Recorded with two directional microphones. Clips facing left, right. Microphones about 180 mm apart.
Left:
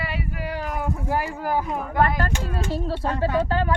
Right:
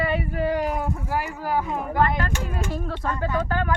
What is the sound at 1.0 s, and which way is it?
Speech, 25° left (ahead or behind).